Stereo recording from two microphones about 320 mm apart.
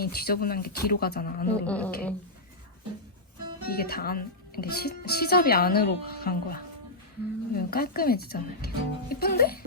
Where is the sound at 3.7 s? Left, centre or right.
Left.